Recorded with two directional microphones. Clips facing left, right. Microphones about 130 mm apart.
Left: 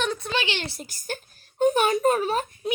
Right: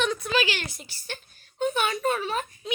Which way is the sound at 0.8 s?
45° left (ahead or behind).